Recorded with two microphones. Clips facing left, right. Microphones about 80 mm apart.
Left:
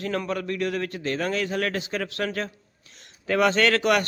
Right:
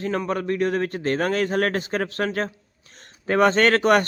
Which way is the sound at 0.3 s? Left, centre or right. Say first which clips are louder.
Right 4 dB; right.